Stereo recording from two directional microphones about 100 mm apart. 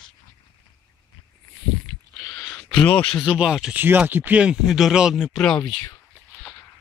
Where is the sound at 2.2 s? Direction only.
10° left (ahead or behind).